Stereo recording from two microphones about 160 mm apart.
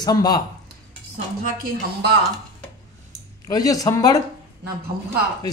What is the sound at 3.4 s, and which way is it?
Speech, 20° left (ahead or behind).